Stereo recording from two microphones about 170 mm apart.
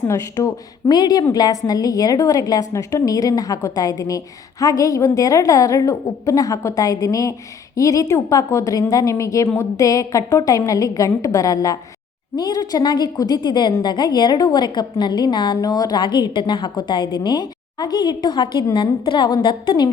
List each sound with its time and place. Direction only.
0.0 s a woman's voice: 20° left (ahead or behind)